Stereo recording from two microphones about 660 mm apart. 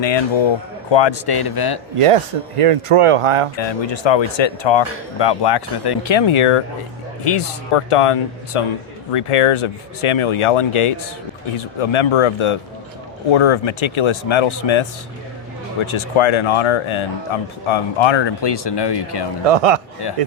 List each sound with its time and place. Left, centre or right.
0.0 s speech: left
2.0 s speech: right
3.6 s speech: left
7.9 s speech: left
19.5 s a man's voice: right